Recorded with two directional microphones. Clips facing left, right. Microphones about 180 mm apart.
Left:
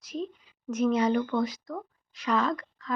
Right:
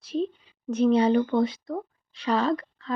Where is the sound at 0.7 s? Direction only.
30° right (ahead or behind).